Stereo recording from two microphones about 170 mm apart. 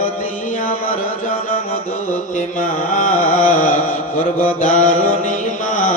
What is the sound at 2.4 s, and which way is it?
Carnatic music, 45° left (ahead or behind).